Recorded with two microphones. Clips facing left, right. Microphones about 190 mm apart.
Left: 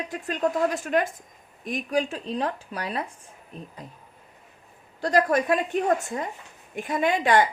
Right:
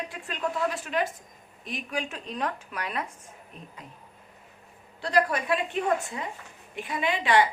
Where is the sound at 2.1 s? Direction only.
30° left (ahead or behind).